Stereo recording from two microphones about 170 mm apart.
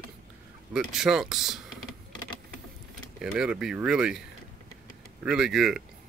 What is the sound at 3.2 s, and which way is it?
Speech, 5° right (ahead or behind).